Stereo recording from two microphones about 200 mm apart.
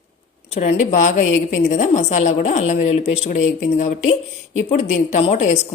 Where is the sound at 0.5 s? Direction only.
35° left (ahead or behind).